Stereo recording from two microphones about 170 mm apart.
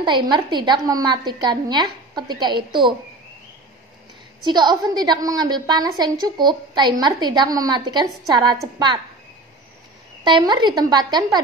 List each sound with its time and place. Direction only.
0.0 s a woman's voice: 25° right (ahead or behind)
4.4 s a woman's voice: 25° right (ahead or behind)
10.2 s a woman's voice: 25° right (ahead or behind)